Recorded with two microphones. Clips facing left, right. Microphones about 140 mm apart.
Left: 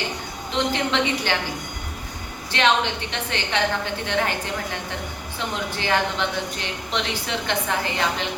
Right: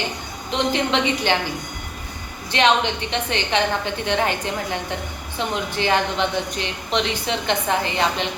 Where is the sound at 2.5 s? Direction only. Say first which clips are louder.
Right 2 dB; 20° right (ahead or behind).